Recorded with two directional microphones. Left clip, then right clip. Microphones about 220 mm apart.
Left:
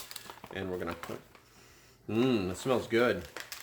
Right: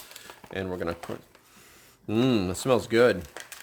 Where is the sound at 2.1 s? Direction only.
45° right (ahead or behind).